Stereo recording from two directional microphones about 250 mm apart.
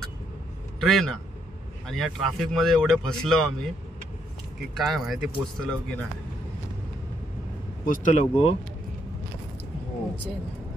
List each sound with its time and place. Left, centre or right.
0.7 s a man's voice: centre
4.7 s speech: centre
7.8 s speech: left